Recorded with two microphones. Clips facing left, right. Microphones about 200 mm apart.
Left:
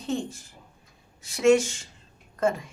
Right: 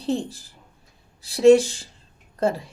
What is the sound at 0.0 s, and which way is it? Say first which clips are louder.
Speech: right 4 dB; 35° right (ahead or behind).